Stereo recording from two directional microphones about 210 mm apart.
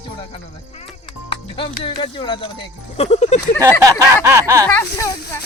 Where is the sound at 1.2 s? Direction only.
25° left (ahead or behind).